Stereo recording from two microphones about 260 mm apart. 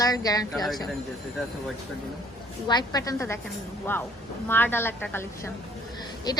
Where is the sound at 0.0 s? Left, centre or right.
Centre.